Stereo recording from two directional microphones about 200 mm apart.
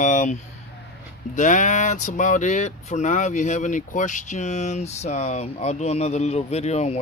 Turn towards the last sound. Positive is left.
turn(degrees=30)  # may be behind; listen again after turning